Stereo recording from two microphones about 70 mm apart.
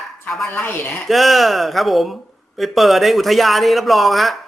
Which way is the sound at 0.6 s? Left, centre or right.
Left.